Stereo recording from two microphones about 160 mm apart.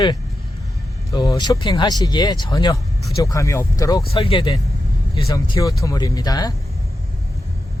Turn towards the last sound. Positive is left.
turn(degrees=25)  # may be behind; listen again after turning